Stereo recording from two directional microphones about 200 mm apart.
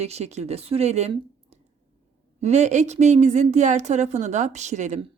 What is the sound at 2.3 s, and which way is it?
Speech, 35° right (ahead or behind).